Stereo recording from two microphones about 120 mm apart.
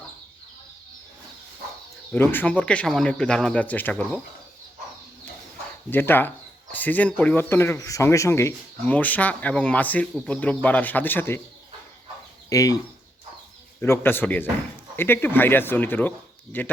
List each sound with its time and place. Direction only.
2.1 s speech: 15° left (ahead or behind)
5.9 s speech: 15° left (ahead or behind)
8.8 s speech: 10° left (ahead or behind)
12.5 s speech: 30° left (ahead or behind)
13.8 s speech: 20° left (ahead or behind)